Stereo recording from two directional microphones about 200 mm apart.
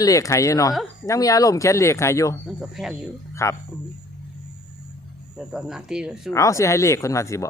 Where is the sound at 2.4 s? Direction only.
5° right (ahead or behind).